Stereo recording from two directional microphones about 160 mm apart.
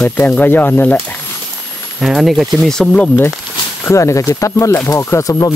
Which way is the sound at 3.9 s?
20° left (ahead or behind).